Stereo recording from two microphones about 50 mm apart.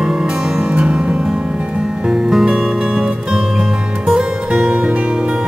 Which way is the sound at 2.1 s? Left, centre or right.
Centre.